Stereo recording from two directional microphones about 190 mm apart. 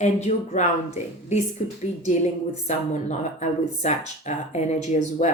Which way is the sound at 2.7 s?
40° left (ahead or behind).